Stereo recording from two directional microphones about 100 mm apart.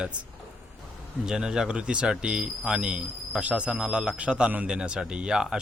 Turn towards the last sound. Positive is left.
turn(degrees=-10)  # may be behind; listen again after turning